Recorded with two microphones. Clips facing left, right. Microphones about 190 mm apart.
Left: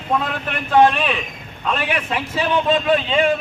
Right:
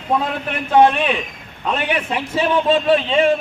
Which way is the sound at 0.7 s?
20° right (ahead or behind).